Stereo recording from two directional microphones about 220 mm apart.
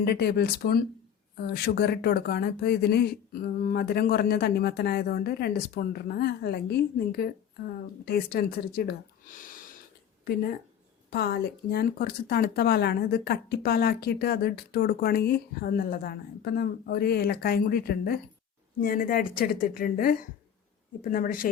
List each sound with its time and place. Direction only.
0.0 s speech: 45° left (ahead or behind)
11.1 s a woman's voice: 45° left (ahead or behind)